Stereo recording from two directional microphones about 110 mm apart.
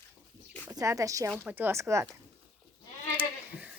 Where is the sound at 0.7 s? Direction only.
30° right (ahead or behind).